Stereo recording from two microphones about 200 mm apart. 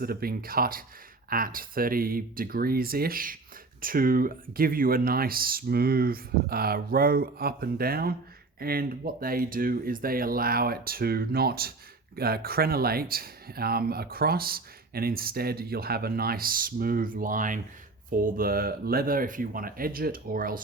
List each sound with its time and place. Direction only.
0.0 s speech: 50° right (ahead or behind)